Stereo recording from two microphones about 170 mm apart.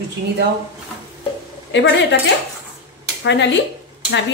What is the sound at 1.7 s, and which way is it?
Speech, 90° left.